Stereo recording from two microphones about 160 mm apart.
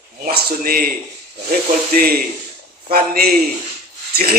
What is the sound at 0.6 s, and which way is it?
Speech, 65° right (ahead or behind).